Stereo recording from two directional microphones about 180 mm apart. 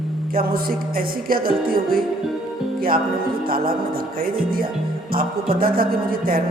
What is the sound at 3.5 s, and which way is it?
Speech, 55° right (ahead or behind).